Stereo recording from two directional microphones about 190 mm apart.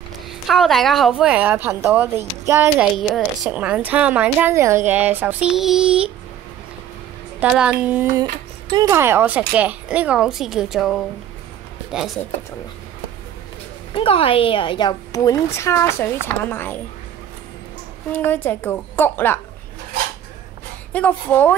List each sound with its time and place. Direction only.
0.5 s a woman's voice: centre (ahead or behind)
3.0 s a woman's voice: centre (ahead or behind)
7.3 s a woman's voice: 5° right (ahead or behind)
13.9 s a woman's voice: 30° left (ahead or behind); by 16.8 s 10° left (ahead or behind)
18.1 s a woman's voice: 10° left (ahead or behind)
20.9 s a woman's voice: 10° left (ahead or behind)